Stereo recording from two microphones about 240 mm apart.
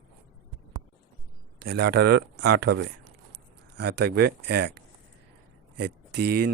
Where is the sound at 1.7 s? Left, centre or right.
Right.